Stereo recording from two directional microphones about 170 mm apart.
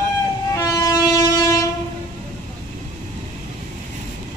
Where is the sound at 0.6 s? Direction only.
20° left (ahead or behind).